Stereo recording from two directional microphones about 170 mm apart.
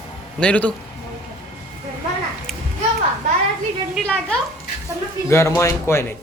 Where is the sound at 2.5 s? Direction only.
5° left (ahead or behind).